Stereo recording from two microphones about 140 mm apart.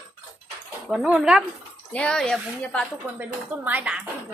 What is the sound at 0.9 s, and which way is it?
Speech, 5° right (ahead or behind).